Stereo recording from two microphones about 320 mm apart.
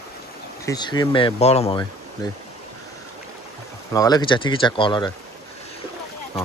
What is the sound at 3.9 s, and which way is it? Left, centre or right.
Speech, centre.